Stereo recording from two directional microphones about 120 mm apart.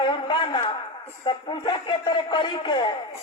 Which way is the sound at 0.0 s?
45° left (ahead or behind).